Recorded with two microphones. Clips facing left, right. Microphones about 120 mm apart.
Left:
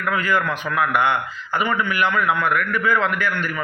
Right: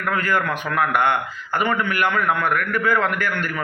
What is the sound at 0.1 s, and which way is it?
Speech, 45° right (ahead or behind).